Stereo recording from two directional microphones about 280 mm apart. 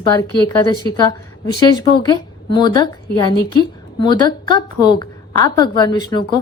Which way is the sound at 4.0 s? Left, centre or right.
Centre.